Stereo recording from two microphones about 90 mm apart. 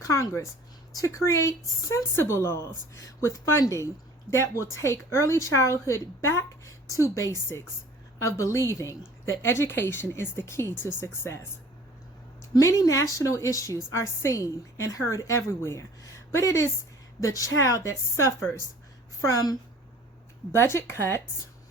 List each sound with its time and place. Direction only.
0.0 s a woman's voice: 35° left (ahead or behind)
12.5 s speech: 35° left (ahead or behind)
20.5 s a woman's voice: 30° left (ahead or behind)